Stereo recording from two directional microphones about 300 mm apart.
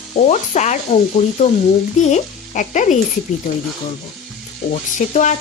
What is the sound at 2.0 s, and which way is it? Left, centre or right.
Frying, left.